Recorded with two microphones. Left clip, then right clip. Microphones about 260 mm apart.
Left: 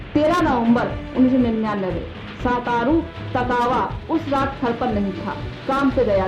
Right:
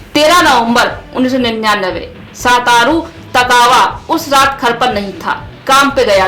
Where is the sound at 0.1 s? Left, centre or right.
Centre.